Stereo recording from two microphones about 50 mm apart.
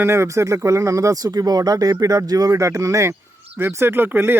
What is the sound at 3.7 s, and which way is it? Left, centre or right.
Speech, right.